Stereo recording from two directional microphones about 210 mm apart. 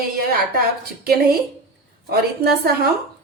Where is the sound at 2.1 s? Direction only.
45° right (ahead or behind).